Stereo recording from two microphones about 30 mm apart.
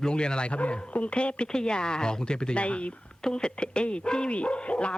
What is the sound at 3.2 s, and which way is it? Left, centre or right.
Speech, left.